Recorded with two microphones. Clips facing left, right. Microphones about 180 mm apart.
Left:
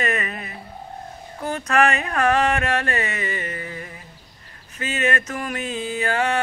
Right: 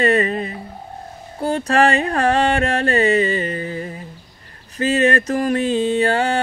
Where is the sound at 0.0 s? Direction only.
30° right (ahead or behind).